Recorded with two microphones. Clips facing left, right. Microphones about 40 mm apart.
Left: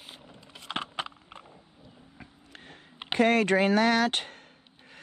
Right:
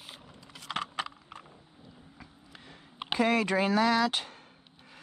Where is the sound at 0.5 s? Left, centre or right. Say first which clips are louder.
Even; left.